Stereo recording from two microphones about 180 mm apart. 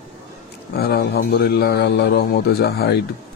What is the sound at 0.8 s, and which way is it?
Speech, 60° left (ahead or behind).